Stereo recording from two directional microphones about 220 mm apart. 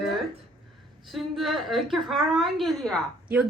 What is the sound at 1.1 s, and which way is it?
A woman's voice, centre (ahead or behind).